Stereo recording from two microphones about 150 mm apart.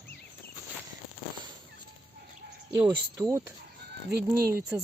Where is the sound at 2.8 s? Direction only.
20° right (ahead or behind).